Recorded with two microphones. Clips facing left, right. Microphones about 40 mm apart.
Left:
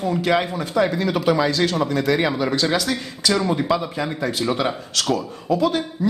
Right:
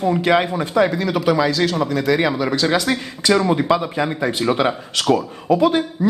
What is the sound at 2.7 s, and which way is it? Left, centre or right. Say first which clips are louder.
Speech: right 3 dB; centre.